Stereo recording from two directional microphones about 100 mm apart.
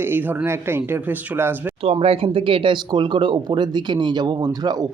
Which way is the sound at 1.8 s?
75° right (ahead or behind).